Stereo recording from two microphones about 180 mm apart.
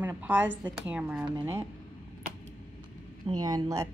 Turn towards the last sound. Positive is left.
turn(degrees=-20)  # may be behind; listen again after turning